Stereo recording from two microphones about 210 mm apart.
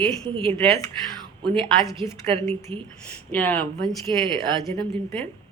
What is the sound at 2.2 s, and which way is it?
Speech, 30° right (ahead or behind).